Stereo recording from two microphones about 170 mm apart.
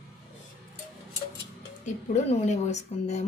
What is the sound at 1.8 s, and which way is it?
Speech, 45° left (ahead or behind).